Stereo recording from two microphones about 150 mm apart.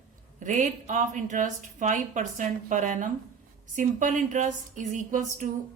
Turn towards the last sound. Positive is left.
turn(degrees=-55)  # may be behind; listen again after turning